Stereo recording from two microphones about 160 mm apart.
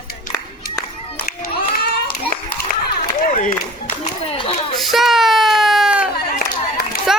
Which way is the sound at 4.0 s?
35° left (ahead or behind).